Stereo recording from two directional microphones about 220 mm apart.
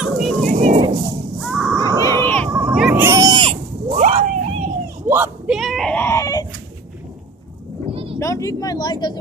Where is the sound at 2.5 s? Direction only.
5° right (ahead or behind); by 4.7 s 30° right (ahead or behind).